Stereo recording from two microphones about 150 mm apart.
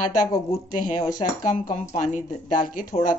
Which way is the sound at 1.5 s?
55° left (ahead or behind).